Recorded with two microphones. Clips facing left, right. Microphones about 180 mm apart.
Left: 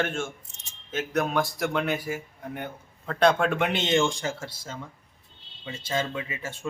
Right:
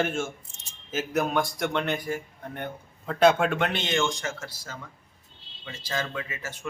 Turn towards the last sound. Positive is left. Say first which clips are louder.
# left 1 dB
turn(degrees=25)  # may be behind; listen again after turning